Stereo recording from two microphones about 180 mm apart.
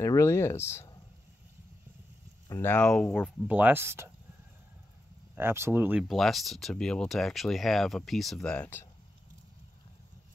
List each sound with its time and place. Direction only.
0.0 s speech: 15° left (ahead or behind)
2.6 s speech: 5° left (ahead or behind)
3.4 s speech: 10° right (ahead or behind)
5.3 s speech: 15° right (ahead or behind)
6.0 s speech: centre (ahead or behind)